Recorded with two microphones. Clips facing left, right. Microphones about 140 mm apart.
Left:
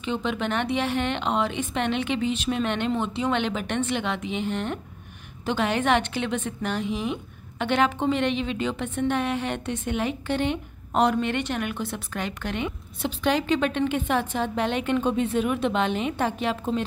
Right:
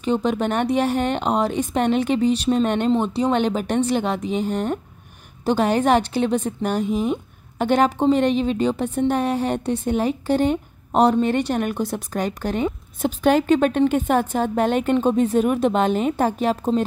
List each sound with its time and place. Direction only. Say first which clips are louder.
0.0 s a woman's voice: right 6 dB; 40° right (ahead or behind)